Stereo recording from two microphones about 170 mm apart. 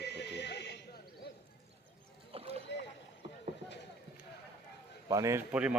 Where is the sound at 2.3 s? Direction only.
35° right (ahead or behind).